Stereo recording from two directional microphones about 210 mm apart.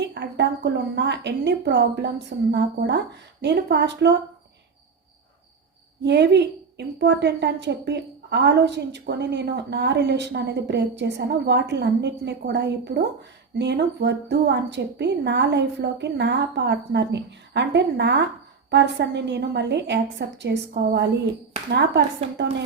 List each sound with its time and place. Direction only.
0.0 s a woman's voice: 55° right (ahead or behind)
6.0 s a woman's voice: 55° right (ahead or behind)